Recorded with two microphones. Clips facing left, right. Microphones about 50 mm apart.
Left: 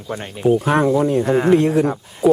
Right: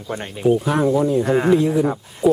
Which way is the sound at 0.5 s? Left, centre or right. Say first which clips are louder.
Left 2 dB; left.